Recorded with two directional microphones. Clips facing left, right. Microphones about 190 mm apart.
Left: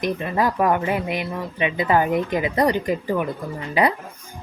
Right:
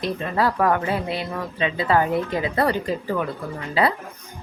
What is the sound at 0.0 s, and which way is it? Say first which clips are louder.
Speech: left 1 dB; 15° left (ahead or behind).